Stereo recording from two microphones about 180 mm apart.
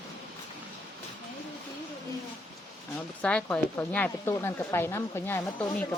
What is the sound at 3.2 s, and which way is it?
A woman's voice, 5° left (ahead or behind).